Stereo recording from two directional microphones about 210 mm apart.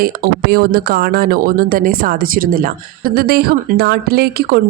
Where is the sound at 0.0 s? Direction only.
45° right (ahead or behind).